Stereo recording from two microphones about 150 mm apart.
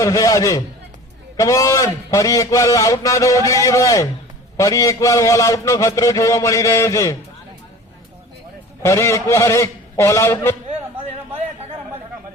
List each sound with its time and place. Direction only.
0.0 s a man's voice: 20° left (ahead or behind)
8.8 s a man's voice: 20° left (ahead or behind)